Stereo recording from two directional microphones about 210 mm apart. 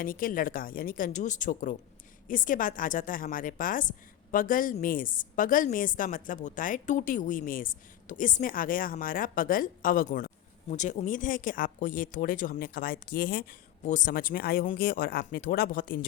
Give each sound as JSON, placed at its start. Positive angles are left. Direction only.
{"t": 0.0, "sound": "a woman's voice", "side_deg": 40}